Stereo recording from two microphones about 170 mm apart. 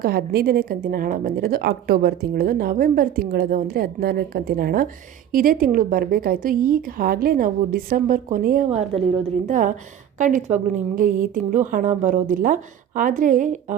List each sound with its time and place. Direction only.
0.0 s a woman's voice: 65° right (ahead or behind)
8.6 s a woman's voice: 40° right (ahead or behind)